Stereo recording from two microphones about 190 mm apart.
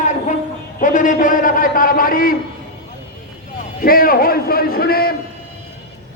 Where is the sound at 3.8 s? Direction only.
50° left (ahead or behind).